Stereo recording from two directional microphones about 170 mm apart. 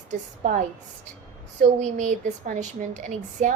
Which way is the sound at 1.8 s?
45° right (ahead or behind).